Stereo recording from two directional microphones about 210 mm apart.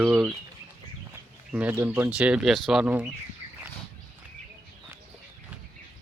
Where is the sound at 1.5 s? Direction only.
10° right (ahead or behind).